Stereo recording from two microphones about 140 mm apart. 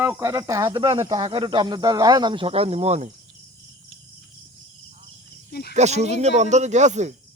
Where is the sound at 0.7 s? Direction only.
40° right (ahead or behind).